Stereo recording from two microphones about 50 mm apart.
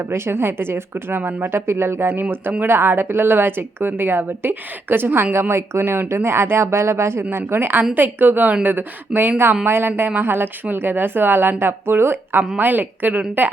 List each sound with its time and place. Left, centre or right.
0.1 s a woman's voice: right
2.2 s a woman's voice: right
2.6 s a woman's voice: right
12.4 s a woman's voice: right